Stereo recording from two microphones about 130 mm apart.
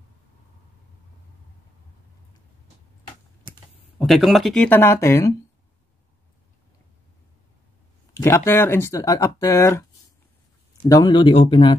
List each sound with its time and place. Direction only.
4.0 s speech: centre (ahead or behind); by 5.3 s 20° left (ahead or behind)
8.1 s speech: 20° left (ahead or behind)
10.9 s speech: 35° left (ahead or behind)